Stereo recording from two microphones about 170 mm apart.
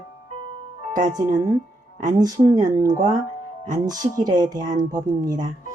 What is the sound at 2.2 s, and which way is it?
Speech, 20° right (ahead or behind).